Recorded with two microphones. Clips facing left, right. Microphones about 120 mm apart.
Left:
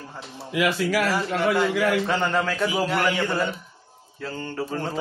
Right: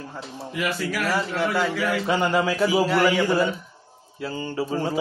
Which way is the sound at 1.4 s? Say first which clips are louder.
Left 5 dB; centre (ahead or behind).